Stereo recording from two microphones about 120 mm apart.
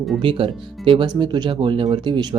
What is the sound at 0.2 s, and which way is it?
Speech, 50° right (ahead or behind).